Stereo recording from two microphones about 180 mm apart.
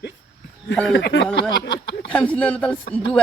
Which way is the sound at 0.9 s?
85° left.